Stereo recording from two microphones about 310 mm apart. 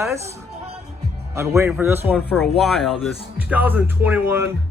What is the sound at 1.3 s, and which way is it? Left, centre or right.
Speech, centre.